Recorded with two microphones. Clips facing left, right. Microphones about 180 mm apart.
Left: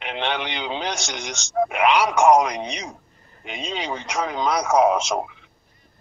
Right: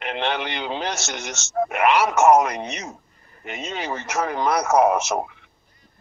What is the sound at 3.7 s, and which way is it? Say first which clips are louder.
Speech: even; 5° right (ahead or behind).